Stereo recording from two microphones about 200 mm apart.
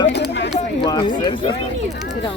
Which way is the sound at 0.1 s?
60° left (ahead or behind).